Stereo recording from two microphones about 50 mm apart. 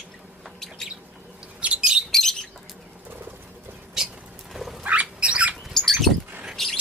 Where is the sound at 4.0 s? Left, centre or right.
Centre.